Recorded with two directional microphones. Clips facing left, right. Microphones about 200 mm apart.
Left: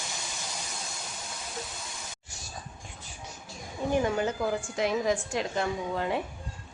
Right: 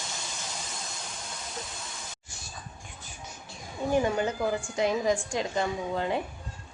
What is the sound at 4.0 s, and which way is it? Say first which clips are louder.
A woman's voice: even; centre (ahead or behind).